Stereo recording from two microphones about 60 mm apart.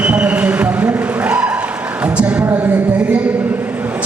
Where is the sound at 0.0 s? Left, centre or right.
Right.